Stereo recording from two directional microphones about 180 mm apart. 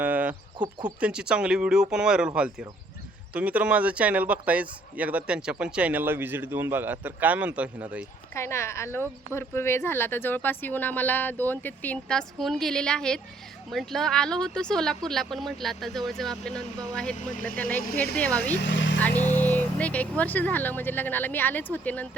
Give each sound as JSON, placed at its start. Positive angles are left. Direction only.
{"t": 0.0, "sound": "a sound", "side_deg": -10}
{"t": 0.9, "sound": "speech", "side_deg": -5}
{"t": 8.3, "sound": "speech", "side_deg": 15}
{"t": 18.6, "sound": "vehicle", "side_deg": 85}
{"t": 19.2, "sound": "speech", "side_deg": 10}